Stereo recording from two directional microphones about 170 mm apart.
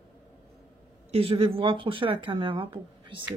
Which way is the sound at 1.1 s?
35° right (ahead or behind).